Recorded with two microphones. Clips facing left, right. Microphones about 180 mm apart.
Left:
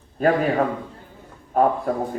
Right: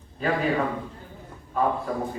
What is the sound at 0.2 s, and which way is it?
Speech, 50° left (ahead or behind).